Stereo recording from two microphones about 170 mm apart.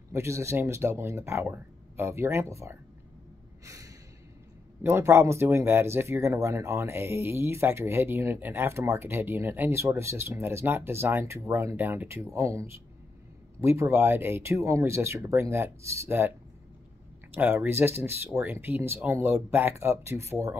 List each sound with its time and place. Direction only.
0.1 s speech: 15° right (ahead or behind)
3.6 s gasp: 20° right (ahead or behind)
4.8 s speech: 15° right (ahead or behind)